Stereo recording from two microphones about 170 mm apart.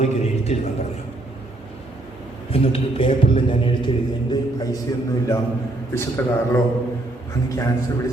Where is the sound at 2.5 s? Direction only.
35° left (ahead or behind).